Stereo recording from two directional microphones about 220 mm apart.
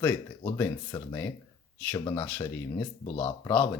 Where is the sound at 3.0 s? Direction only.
25° left (ahead or behind).